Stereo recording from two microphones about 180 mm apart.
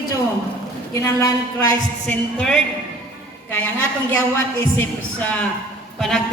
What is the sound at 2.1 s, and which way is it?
A man's voice, 5° left (ahead or behind).